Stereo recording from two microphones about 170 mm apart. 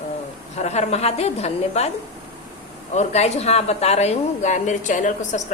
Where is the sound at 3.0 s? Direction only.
40° left (ahead or behind).